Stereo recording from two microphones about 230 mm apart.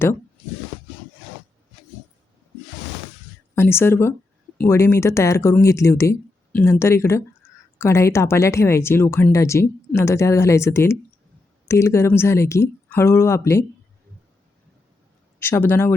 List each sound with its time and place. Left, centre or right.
3.5 s speech: centre
15.4 s speech: centre